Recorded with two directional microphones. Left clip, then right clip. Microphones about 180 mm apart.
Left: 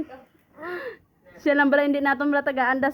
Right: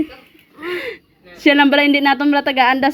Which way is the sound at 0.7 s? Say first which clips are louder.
Right 9 dB; 10° right (ahead or behind).